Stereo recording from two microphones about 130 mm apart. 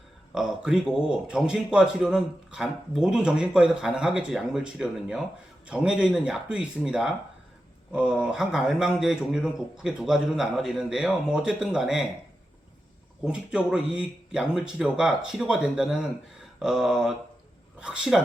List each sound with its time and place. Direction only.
0.3 s a man's voice: 5° right (ahead or behind)
13.2 s a man's voice: 5° right (ahead or behind)